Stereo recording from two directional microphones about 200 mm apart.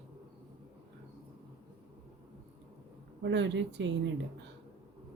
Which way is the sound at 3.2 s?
60° right (ahead or behind).